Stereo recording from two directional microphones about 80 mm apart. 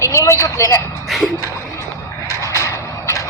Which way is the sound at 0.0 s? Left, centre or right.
Left.